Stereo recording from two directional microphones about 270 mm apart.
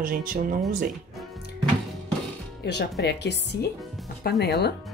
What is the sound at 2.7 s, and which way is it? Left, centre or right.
Speech, left.